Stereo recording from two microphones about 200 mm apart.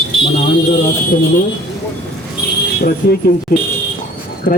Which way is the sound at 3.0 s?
50° left (ahead or behind).